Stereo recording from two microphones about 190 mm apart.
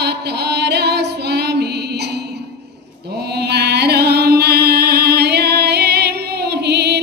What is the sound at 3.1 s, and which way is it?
Music, 60° right (ahead or behind).